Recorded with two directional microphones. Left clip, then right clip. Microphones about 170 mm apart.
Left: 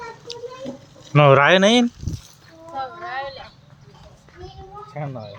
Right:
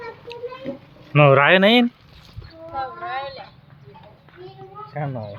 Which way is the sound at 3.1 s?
35° right (ahead or behind).